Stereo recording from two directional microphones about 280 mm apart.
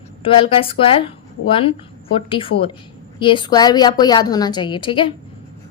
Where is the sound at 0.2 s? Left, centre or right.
Centre.